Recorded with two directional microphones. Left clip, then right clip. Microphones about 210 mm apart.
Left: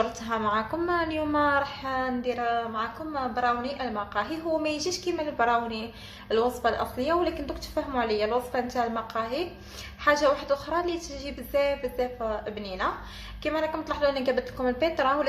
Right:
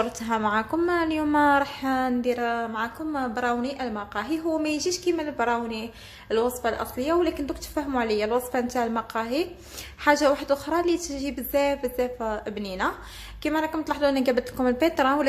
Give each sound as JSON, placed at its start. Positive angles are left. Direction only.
{"t": 0.0, "sound": "a woman's voice", "side_deg": -30}